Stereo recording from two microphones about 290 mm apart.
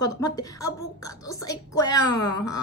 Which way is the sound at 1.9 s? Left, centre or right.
Left.